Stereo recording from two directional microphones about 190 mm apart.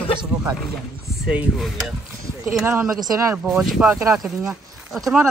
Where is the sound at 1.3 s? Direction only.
Centre (ahead or behind).